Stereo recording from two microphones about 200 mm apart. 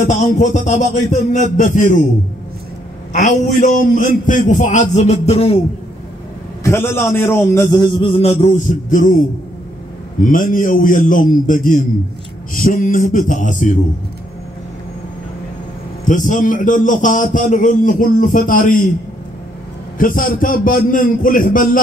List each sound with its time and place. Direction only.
0.0 s a man's voice: 35° left (ahead or behind)
3.1 s a man's voice: 40° left (ahead or behind)
6.6 s a man's voice: 10° left (ahead or behind); by 9.1 s 40° left (ahead or behind)
10.2 s a man's voice: 45° left (ahead or behind)
16.1 s a man's voice: 40° left (ahead or behind)
20.0 s a man's voice: 45° left (ahead or behind)